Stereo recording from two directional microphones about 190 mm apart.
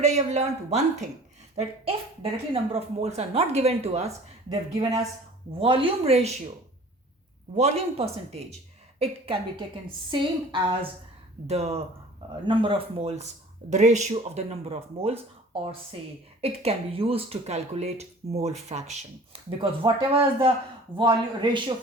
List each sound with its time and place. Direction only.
0.0 s speech: 35° right (ahead or behind)
4.4 s speech: 20° right (ahead or behind)
5.5 s speech: 30° right (ahead or behind)
7.5 s a woman's voice: 30° right (ahead or behind)
16.4 s speech: 30° right (ahead or behind)
19.5 s a woman's voice: 25° right (ahead or behind)